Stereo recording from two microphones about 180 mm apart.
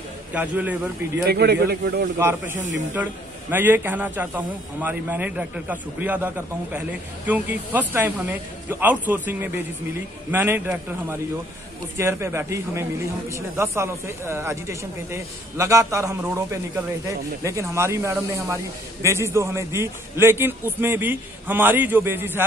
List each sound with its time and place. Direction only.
0.3 s speech: 10° right (ahead or behind)
1.2 s a man's voice: 65° right (ahead or behind)
2.1 s speech: 15° right (ahead or behind)